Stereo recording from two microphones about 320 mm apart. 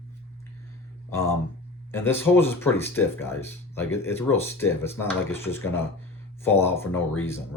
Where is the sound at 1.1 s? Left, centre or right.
Centre.